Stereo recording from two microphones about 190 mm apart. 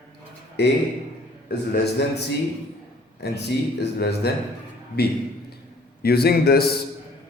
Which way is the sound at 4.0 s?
60° left (ahead or behind).